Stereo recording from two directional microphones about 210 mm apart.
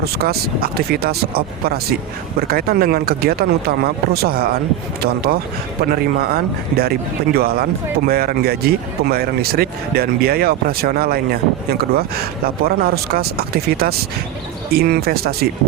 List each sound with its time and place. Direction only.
0.0 s speech: 50° right (ahead or behind)